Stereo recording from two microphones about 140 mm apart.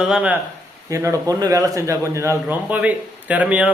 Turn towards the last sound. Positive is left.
turn(degrees=-10)  # may be behind; listen again after turning